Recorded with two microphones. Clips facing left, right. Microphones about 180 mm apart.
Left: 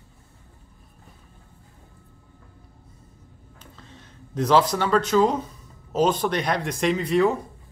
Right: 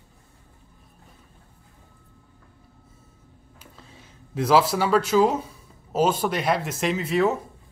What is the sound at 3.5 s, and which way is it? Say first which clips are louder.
Speech: left 1 dB; 5° right (ahead or behind).